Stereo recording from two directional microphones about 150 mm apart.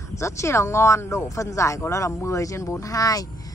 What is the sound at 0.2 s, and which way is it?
Speech, 20° left (ahead or behind).